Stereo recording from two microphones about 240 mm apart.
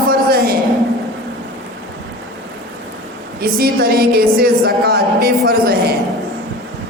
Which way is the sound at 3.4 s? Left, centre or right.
Right.